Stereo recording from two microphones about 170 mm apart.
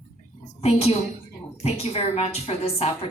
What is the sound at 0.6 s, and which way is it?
A woman's voice, 40° left (ahead or behind).